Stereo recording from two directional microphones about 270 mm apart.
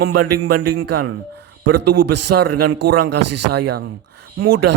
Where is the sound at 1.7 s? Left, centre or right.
Right.